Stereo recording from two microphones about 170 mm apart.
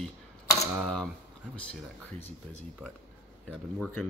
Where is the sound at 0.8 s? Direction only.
Centre (ahead or behind).